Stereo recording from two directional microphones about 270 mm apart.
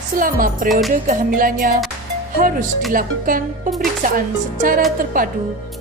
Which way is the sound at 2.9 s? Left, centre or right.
Right.